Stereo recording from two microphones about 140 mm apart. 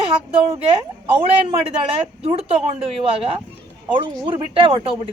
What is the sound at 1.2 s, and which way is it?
A woman's voice, 40° right (ahead or behind).